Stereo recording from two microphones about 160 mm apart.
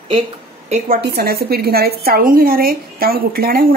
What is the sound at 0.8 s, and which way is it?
A woman's voice, 70° right (ahead or behind).